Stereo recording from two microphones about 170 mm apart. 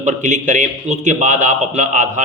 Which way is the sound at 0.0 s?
45° right (ahead or behind).